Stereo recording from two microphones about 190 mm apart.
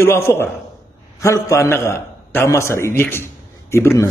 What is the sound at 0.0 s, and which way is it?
A man's voice, 15° left (ahead or behind).